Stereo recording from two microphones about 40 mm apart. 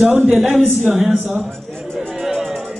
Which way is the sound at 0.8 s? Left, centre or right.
Right.